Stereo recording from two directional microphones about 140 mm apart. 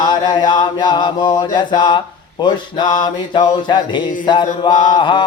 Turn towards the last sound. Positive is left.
turn(degrees=35)  # may be behind; listen again after turning